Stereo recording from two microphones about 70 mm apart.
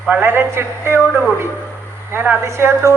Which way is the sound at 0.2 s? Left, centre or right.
Right.